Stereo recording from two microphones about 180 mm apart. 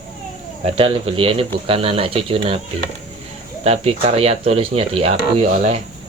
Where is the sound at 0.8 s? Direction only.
30° right (ahead or behind).